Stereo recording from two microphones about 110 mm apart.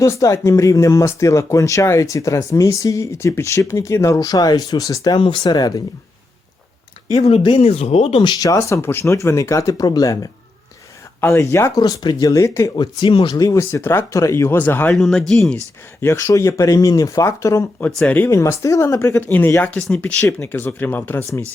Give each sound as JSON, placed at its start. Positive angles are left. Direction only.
{"t": 0.0, "sound": "speech", "side_deg": 30}
{"t": 7.1, "sound": "speech", "side_deg": 65}
{"t": 7.6, "sound": "speech", "side_deg": 70}
{"t": 8.2, "sound": "speech", "side_deg": 35}
{"t": 8.5, "sound": "speech", "side_deg": 25}
{"t": 11.2, "sound": "speech", "side_deg": 20}
{"t": 11.8, "sound": "speech", "side_deg": 40}
{"t": 12.7, "sound": "speech", "side_deg": 45}
{"t": 13.3, "sound": "speech", "side_deg": 30}
{"t": 14.9, "sound": "speech", "side_deg": 5}
{"t": 16.0, "sound": "speech", "side_deg": 25}
{"t": 17.7, "sound": "speech", "side_deg": 15}
{"t": 18.3, "sound": "speech", "side_deg": 30}